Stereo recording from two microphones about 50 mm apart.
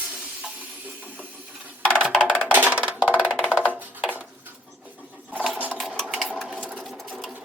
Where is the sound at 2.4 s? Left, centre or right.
Right.